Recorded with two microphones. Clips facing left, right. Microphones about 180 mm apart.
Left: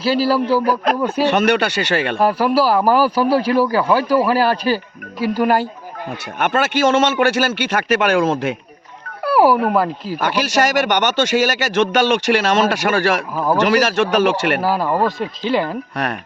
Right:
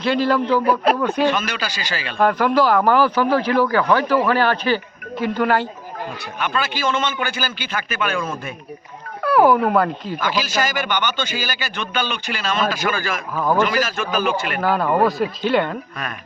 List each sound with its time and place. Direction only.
0.0 s speech: 5° left (ahead or behind)
1.3 s speech: 70° left (ahead or behind)
2.1 s speech: 5° left (ahead or behind)
6.4 s speech: 70° left (ahead or behind); by 8.5 s 90° left
9.2 s speech: 5° left (ahead or behind)
10.5 s speech: 75° left (ahead or behind)
13.3 s speech: 10° left (ahead or behind)
13.6 s speech: 75° left (ahead or behind)
14.6 s speech: 5° left (ahead or behind)